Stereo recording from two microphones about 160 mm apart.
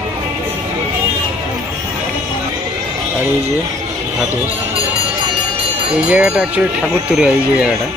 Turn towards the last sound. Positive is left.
turn(degrees=-5)  # may be behind; listen again after turning